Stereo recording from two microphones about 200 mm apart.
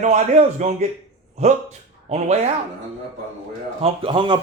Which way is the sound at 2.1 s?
30° right (ahead or behind).